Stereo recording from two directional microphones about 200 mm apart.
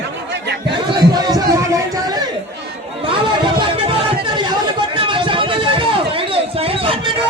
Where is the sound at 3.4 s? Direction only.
25° right (ahead or behind).